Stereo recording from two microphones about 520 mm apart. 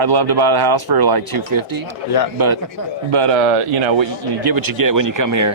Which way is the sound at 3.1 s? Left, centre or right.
Right.